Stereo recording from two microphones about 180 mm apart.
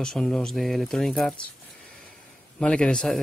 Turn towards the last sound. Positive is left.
turn(degrees=5)  # may be behind; listen again after turning